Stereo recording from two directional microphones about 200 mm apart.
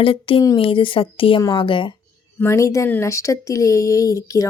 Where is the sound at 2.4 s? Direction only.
15° left (ahead or behind).